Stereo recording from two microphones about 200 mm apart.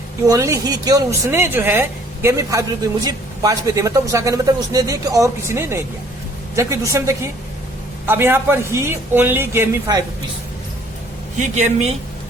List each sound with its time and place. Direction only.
0.3 s speech: 15° right (ahead or behind)
6.9 s speech: 15° right (ahead or behind)
11.3 s a man's voice: 40° right (ahead or behind)